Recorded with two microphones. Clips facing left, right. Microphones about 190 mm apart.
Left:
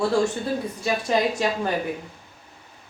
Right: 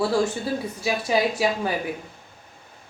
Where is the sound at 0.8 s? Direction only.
5° right (ahead or behind).